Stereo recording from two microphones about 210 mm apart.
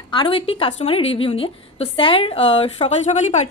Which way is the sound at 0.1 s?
25° left (ahead or behind).